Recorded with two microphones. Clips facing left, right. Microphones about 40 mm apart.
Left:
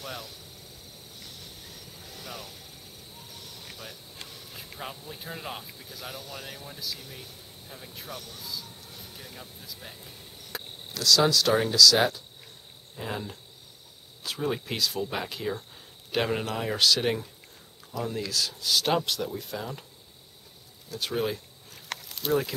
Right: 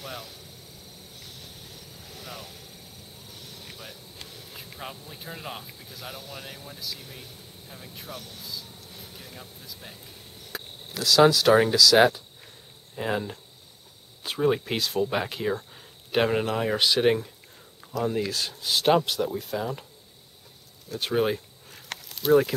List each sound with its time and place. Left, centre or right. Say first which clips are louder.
0.0 s speech: even; centre
2.0 s vehicle: even; centre
3.6 s vehicle: even; centre
4.2 s speech: even; centre
10.5 s cricket: right 1 dB; centre
11.0 s speech: right 4 dB; centre
12.9 s speech: right 7 dB; right
14.2 s speech: right 6 dB; centre
20.9 s speech: right 4 dB; centre
21.7 s snake: left 1 dB; centre